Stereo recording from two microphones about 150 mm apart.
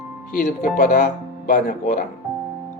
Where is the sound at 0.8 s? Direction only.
75° left (ahead or behind).